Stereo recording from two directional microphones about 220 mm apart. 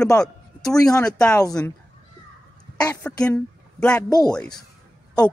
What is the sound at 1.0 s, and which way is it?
Speech, 5° left (ahead or behind).